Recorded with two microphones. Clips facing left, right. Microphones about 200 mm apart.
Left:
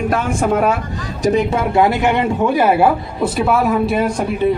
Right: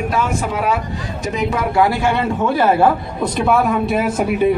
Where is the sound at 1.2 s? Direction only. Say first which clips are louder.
Left 5 dB; 30° left (ahead or behind); by 4.5 s 5° right (ahead or behind).